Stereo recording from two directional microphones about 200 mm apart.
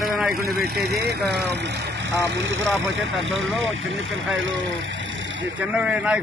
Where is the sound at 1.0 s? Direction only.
55° right (ahead or behind).